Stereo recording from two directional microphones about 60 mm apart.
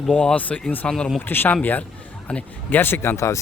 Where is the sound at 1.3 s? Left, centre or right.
Left; by 2.4 s centre.